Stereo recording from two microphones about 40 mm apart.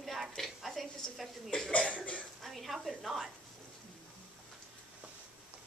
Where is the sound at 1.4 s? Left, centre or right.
Centre.